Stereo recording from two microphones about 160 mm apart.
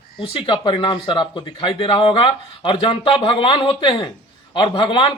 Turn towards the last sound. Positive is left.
turn(degrees=30)  # may be behind; listen again after turning